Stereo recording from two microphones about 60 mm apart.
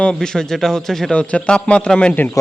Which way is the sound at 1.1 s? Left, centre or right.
Left.